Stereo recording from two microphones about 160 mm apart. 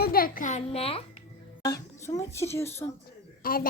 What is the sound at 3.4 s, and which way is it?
Speech, 65° left (ahead or behind).